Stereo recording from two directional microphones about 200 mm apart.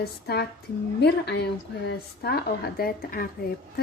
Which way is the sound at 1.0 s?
55° left (ahead or behind).